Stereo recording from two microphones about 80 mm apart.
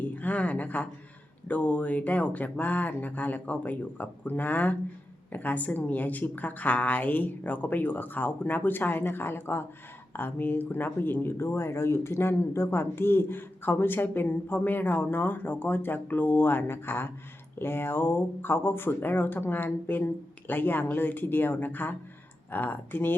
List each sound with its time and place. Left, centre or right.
0.0 s a woman's voice: left